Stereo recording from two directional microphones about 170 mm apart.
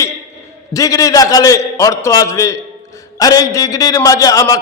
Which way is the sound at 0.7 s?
20° left (ahead or behind).